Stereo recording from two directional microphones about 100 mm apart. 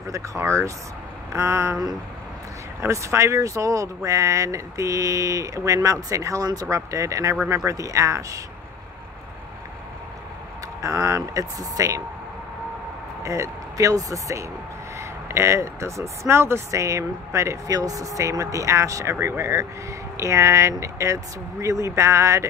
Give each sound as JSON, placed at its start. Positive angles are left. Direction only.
{"t": 0.1, "sound": "speech", "side_deg": -30}
{"t": 1.3, "sound": "a sound", "side_deg": -30}
{"t": 2.8, "sound": "speech", "side_deg": -30}
{"t": 10.8, "sound": "speech", "side_deg": -35}
{"t": 13.2, "sound": "speech", "side_deg": -30}